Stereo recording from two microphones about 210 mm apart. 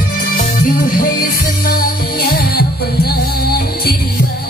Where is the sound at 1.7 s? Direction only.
45° left (ahead or behind).